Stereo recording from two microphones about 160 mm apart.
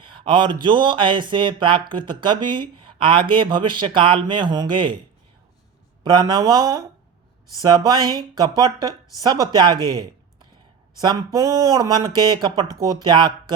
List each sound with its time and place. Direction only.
0.0 s speech: 30° right (ahead or behind)
6.0 s speech: 25° right (ahead or behind)